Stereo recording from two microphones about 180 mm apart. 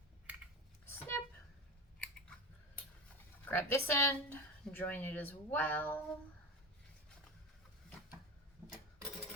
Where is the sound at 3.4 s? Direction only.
10° left (ahead or behind).